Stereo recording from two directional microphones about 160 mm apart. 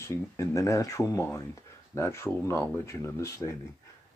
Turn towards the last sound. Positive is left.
turn(degrees=15)  # may be behind; listen again after turning